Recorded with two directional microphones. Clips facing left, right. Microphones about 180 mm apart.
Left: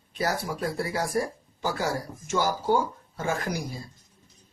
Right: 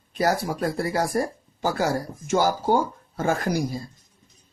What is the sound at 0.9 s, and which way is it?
Speech, 40° right (ahead or behind).